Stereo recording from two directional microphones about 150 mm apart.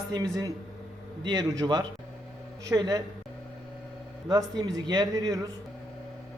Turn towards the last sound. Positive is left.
turn(degrees=-25)  # may be behind; listen again after turning